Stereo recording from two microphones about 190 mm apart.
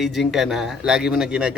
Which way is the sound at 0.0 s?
Centre (ahead or behind).